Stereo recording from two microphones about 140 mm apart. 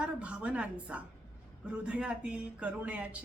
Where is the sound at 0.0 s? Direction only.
10° right (ahead or behind).